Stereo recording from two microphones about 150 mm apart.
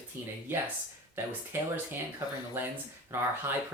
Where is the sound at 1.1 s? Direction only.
15° right (ahead or behind).